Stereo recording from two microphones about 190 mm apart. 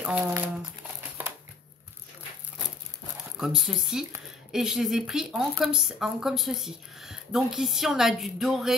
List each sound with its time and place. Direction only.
0.0 s speech: 5° right (ahead or behind)
3.3 s speech: centre (ahead or behind)